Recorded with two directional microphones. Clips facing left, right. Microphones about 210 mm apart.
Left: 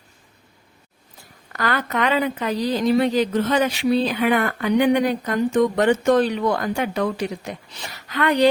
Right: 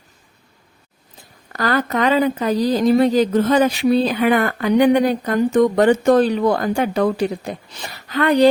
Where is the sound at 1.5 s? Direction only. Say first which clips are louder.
Right 4 dB; 35° right (ahead or behind).